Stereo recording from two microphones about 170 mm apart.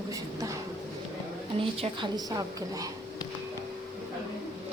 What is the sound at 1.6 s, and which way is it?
A woman's voice, 30° right (ahead or behind).